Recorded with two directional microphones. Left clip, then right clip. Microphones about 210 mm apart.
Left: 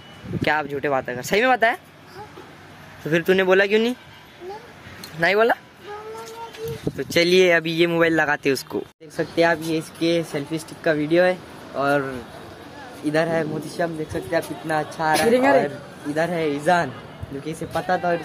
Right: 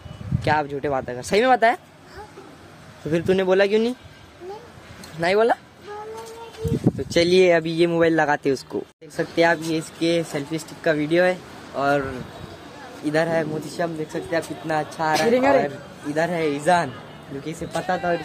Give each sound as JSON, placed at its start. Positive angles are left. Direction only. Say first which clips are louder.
{"t": 0.4, "sound": "speech", "louder": "even", "side_deg": 0}
{"t": 3.1, "sound": "speech", "louder": "left 2 dB", "side_deg": 0}
{"t": 5.2, "sound": "speech", "louder": "left 1 dB", "side_deg": -5}
{"t": 7.0, "sound": "speech", "louder": "left 1 dB", "side_deg": -10}
{"t": 15.1, "sound": "speech", "louder": "left 1 dB", "side_deg": 25}
{"t": 16.2, "sound": "speech", "louder": "even", "side_deg": -5}